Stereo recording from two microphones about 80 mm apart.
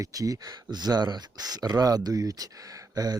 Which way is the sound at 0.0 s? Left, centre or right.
Right.